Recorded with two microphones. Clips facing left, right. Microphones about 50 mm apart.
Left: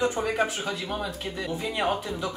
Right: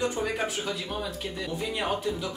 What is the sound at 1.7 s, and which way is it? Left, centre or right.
Speech, centre.